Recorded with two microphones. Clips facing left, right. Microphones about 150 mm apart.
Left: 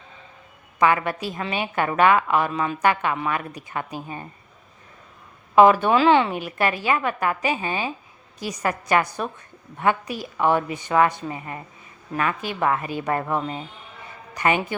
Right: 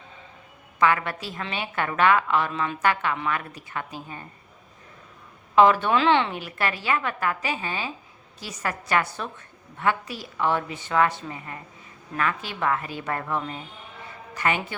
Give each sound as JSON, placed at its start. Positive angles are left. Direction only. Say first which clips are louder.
{"t": 0.8, "sound": "a woman's voice", "louder": "left 3 dB", "side_deg": 15}
{"t": 5.5, "sound": "a woman's voice", "louder": "left 3 dB", "side_deg": 10}
{"t": 14.3, "sound": "a woman's voice", "louder": "left 4 dB", "side_deg": 15}